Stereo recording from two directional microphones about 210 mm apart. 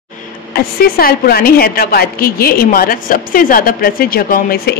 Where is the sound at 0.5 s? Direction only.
45° left (ahead or behind).